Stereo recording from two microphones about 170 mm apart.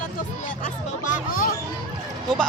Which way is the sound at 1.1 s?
50° left (ahead or behind).